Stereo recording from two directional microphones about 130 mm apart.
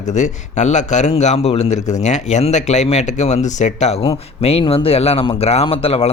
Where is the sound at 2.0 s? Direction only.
65° left (ahead or behind).